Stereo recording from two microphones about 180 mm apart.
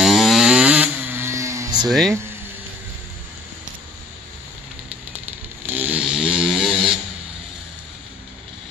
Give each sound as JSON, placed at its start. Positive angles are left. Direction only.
{"t": 0.0, "sound": "vehicle", "side_deg": 0}
{"t": 1.9, "sound": "speech", "side_deg": 0}
{"t": 5.7, "sound": "vehicle", "side_deg": -10}